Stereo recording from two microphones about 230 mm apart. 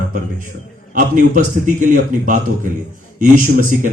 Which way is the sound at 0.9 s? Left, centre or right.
Right.